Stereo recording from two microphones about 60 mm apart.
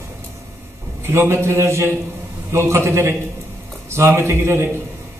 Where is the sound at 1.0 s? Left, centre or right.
Right.